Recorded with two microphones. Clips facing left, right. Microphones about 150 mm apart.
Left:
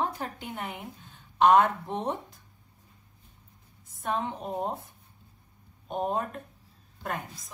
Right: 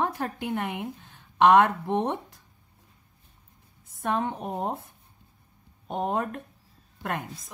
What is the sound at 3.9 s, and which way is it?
Speech, 60° right (ahead or behind).